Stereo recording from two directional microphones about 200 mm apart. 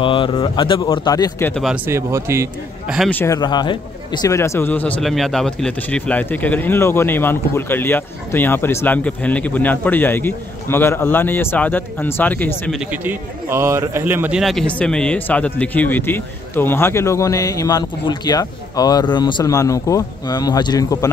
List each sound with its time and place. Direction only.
0.0 s a man's voice: 25° left (ahead or behind)
1.5 s speech: centre (ahead or behind)
1.9 s a man's voice: 15° right (ahead or behind)
3.0 s speech: 10° left (ahead or behind)
3.3 s speech: 20° left (ahead or behind)
12.7 s speech: 10° right (ahead or behind); by 21.1 s 20° left (ahead or behind)